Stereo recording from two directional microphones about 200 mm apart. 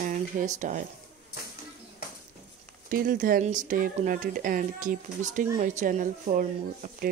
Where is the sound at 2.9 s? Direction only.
45° right (ahead or behind).